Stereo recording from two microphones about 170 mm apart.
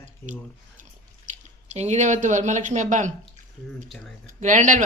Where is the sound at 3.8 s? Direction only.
Centre (ahead or behind).